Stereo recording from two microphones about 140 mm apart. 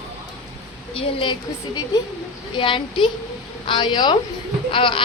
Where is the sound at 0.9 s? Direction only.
40° left (ahead or behind).